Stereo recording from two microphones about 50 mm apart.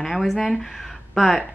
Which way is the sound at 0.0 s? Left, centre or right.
Centre.